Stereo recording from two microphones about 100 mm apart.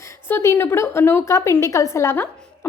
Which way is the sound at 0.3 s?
20° left (ahead or behind).